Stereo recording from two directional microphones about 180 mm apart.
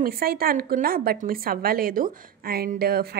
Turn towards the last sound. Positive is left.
turn(degrees=-55)  # may be behind; listen again after turning